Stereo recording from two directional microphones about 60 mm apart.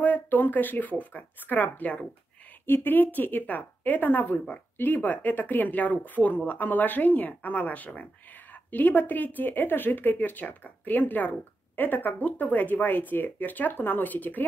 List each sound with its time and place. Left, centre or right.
0.0 s speech: left
2.6 s speech: left